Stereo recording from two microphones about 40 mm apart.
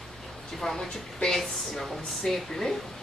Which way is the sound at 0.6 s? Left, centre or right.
Centre.